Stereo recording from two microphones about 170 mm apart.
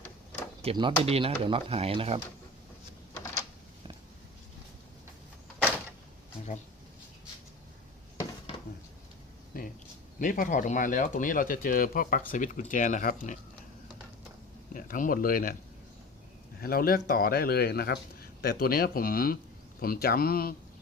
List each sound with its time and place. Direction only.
0.6 s speech: 30° right (ahead or behind)
9.5 s speech: 55° left (ahead or behind)
14.7 s speech: 55° left (ahead or behind)
16.6 s speech: 60° left (ahead or behind)